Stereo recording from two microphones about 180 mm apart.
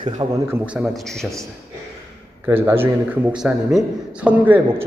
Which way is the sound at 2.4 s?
10° right (ahead or behind).